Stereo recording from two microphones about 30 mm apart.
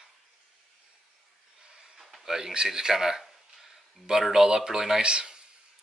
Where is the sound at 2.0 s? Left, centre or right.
Centre.